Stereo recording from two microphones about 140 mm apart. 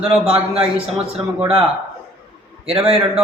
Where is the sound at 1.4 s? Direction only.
45° right (ahead or behind).